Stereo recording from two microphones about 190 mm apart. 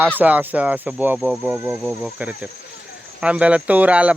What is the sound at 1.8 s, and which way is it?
Speech, centre (ahead or behind).